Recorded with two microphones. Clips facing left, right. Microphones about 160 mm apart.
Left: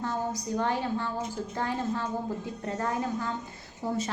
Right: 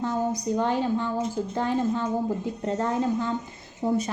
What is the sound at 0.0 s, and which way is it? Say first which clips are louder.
A woman's voice: right 5 dB; 20° right (ahead or behind).